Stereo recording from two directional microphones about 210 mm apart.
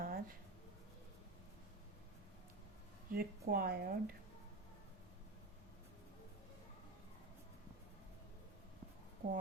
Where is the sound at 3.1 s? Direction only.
45° right (ahead or behind).